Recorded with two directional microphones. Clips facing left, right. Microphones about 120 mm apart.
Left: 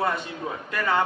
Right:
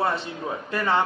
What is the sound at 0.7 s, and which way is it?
Speech, 25° right (ahead or behind).